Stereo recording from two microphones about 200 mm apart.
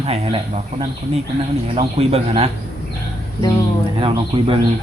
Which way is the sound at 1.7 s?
30° right (ahead or behind).